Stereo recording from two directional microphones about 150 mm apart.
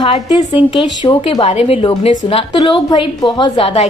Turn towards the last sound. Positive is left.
turn(degrees=40)  # may be behind; listen again after turning